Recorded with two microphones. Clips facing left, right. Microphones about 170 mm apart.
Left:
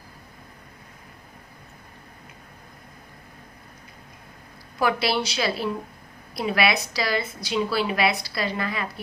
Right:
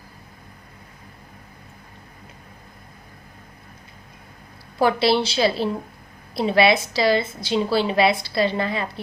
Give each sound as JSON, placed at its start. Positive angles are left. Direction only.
{"t": 4.8, "sound": "a woman's voice", "side_deg": -30}